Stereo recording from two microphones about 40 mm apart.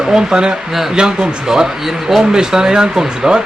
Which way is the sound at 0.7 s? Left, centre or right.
Centre.